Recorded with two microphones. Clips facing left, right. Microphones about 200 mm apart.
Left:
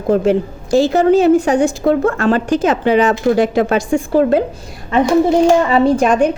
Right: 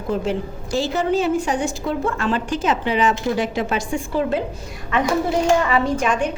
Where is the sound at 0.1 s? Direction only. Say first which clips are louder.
Left 9 dB; 50° left (ahead or behind).